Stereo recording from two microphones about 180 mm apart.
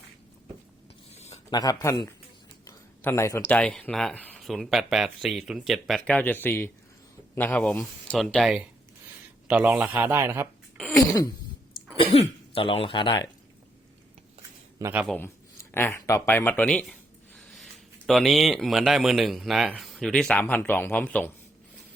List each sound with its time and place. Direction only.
1.1 s a sound: 35° left (ahead or behind)
1.5 s a man's voice: 20° left (ahead or behind); by 10.5 s 15° right (ahead or behind)
10.8 s a sound: centre (ahead or behind)
12.5 s speech: 30° left (ahead or behind)
14.8 s a man's voice: 15° right (ahead or behind)
15.0 s speech: 10° left (ahead or behind)